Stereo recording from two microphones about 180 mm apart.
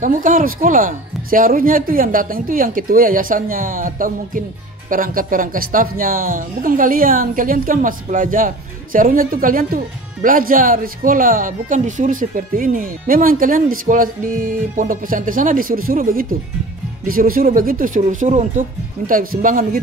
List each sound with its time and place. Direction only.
0.0 s speech: 50° right (ahead or behind)